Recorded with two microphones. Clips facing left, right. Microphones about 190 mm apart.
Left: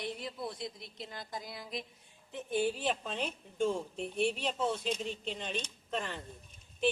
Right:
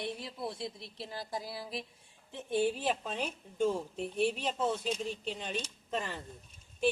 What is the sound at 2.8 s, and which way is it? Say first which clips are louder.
Speech: right 1 dB; 10° right (ahead or behind).